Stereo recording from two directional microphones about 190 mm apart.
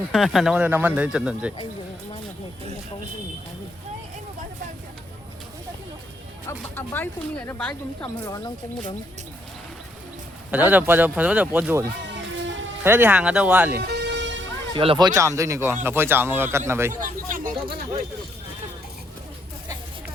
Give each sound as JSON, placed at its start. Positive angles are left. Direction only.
{"t": 0.1, "sound": "speech", "side_deg": 0}
{"t": 6.5, "sound": "speech", "side_deg": 10}
{"t": 10.5, "sound": "speech", "side_deg": -10}
{"t": 13.7, "sound": "vehicle", "side_deg": -60}
{"t": 14.7, "sound": "speech", "side_deg": -25}
{"t": 17.0, "sound": "speech", "side_deg": -45}